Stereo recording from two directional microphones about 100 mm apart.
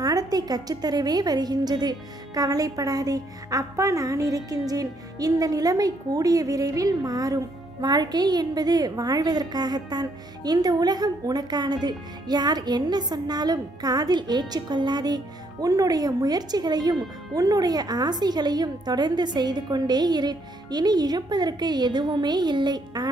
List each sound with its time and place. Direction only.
0.0 s a woman's voice: 40° right (ahead or behind)